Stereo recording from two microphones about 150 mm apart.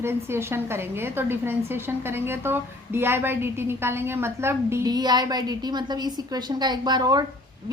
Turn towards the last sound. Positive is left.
turn(degrees=-25)  # may be behind; listen again after turning